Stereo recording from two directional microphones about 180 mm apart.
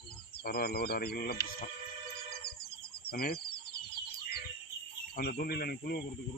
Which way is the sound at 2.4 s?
60° left (ahead or behind).